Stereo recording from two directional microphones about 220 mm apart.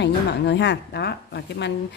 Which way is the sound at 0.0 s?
50° left (ahead or behind).